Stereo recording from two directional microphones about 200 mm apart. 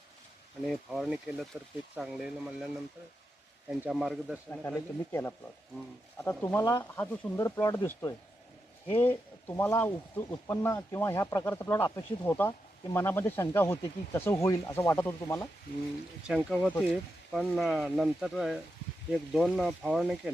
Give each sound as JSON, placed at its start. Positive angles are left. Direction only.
{"t": 0.6, "sound": "speech", "side_deg": 0}
{"t": 3.7, "sound": "speech", "side_deg": -5}
{"t": 4.6, "sound": "speech", "side_deg": 10}
{"t": 16.2, "sound": "speech", "side_deg": 0}
{"t": 16.6, "sound": "speech", "side_deg": 10}